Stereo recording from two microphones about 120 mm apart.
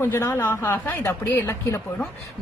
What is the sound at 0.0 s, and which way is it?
Speech, 20° left (ahead or behind).